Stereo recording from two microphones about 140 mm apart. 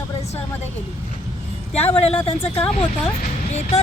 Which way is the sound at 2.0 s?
45° left (ahead or behind).